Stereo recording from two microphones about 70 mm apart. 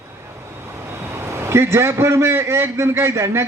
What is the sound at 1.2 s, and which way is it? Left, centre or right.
A man's voice, right.